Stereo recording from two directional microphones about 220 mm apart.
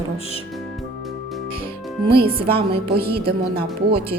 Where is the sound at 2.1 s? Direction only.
25° right (ahead or behind).